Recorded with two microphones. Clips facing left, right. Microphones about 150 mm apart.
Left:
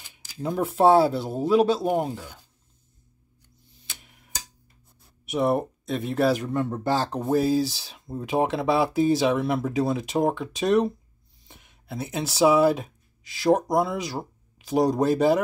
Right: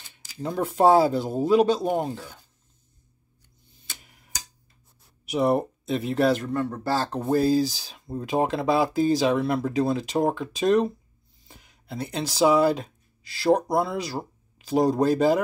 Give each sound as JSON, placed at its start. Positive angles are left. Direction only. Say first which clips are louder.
{"t": 0.1, "sound": "speech", "louder": "left 1 dB", "side_deg": 5}
{"t": 4.0, "sound": "tick-tock", "louder": "left 1 dB", "side_deg": 0}
{"t": 5.2, "sound": "speech", "louder": "right 1 dB", "side_deg": 0}
{"t": 6.3, "sound": "speech", "louder": "even", "side_deg": 15}
{"t": 7.2, "sound": "speech", "louder": "right 3 dB", "side_deg": 0}